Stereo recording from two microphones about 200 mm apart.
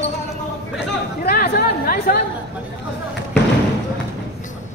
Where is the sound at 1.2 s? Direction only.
45° left (ahead or behind).